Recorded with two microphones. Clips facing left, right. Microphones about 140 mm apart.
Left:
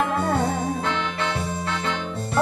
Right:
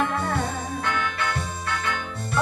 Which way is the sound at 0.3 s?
25° left (ahead or behind).